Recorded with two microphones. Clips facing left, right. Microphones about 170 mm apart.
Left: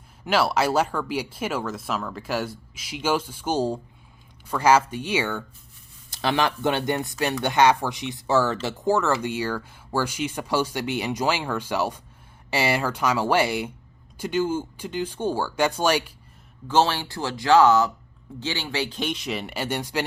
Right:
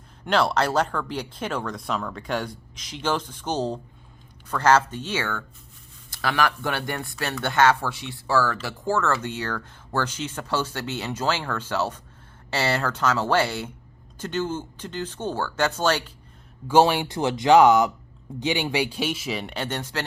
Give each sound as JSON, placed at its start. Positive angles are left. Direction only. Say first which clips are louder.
{"t": 0.3, "sound": "speech", "louder": "even", "side_deg": 5}
{"t": 16.6, "sound": "speech", "louder": "right 3 dB", "side_deg": -15}